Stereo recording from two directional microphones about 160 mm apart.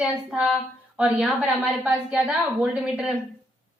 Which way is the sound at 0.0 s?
5° right (ahead or behind).